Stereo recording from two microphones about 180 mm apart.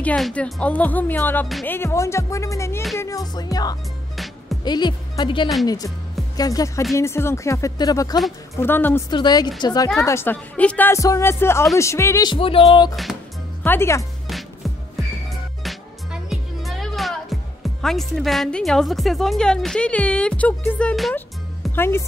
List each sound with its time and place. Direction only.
0.0 s speech: 5° left (ahead or behind)
9.1 s speech: 25° left (ahead or behind)
13.7 s speech: 15° left (ahead or behind)
14.2 s music: centre (ahead or behind)
21.7 s speech: 15° left (ahead or behind)